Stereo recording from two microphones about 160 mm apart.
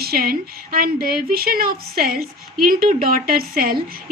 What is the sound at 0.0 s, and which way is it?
A woman's voice, 70° right (ahead or behind).